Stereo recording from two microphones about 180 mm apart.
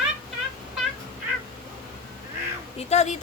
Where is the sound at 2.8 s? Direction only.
40° left (ahead or behind).